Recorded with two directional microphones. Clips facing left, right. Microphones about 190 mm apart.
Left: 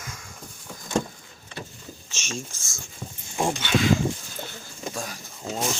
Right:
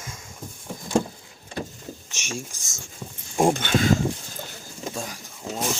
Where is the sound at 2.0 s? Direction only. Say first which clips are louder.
Even; 15° right (ahead or behind).